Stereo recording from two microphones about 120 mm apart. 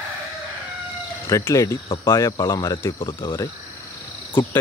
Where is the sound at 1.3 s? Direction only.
25° left (ahead or behind).